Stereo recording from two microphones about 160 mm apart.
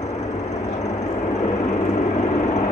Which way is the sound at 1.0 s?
45° left (ahead or behind).